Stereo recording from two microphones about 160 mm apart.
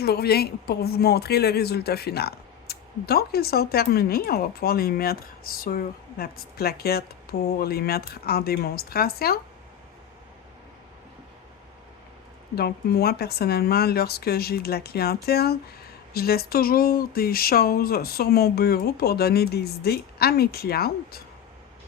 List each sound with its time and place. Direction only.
0.0 s a woman's voice: 85° left
12.5 s a woman's voice: 75° left (ahead or behind)